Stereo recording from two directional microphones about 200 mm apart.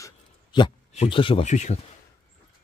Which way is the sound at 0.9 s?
30° left (ahead or behind).